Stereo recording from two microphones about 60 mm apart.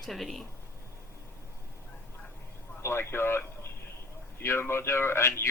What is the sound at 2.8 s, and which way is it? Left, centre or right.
Speech, left.